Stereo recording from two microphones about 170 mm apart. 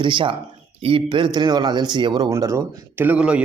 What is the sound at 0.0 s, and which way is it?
Speech, 30° right (ahead or behind).